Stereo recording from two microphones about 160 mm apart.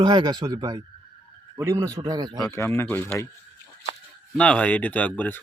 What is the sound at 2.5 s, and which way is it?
Speech, 15° left (ahead or behind).